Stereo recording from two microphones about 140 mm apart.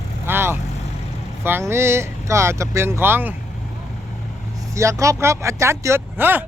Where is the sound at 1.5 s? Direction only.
15° right (ahead or behind).